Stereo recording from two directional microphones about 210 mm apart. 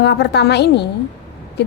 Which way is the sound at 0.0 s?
55° left (ahead or behind).